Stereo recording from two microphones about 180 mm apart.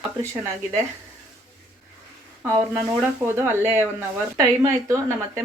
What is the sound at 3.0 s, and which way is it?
Speech, 10° right (ahead or behind).